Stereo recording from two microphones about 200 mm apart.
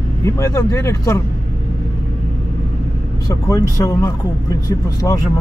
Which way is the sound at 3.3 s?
15° left (ahead or behind).